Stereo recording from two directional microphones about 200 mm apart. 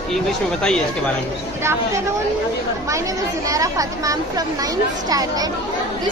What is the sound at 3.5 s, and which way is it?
Speech, 15° right (ahead or behind).